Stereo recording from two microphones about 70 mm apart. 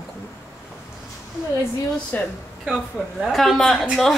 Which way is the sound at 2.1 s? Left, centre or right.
Left.